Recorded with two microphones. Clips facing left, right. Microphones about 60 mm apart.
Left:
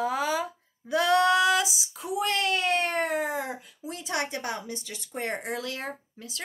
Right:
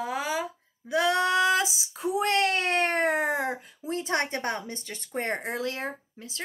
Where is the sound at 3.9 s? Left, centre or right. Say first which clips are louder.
Right 3 dB; right.